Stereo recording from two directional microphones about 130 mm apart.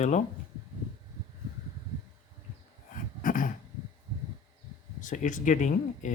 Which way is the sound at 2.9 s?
90° left.